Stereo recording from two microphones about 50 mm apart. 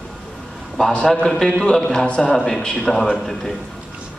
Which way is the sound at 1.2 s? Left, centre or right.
Centre.